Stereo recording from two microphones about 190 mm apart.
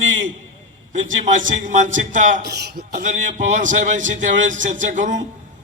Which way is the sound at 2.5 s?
60° right (ahead or behind).